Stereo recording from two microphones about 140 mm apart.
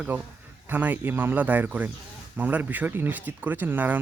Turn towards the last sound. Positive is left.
turn(degrees=-15)  # may be behind; listen again after turning